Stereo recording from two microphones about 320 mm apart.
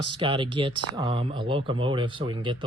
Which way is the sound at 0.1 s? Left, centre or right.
Centre.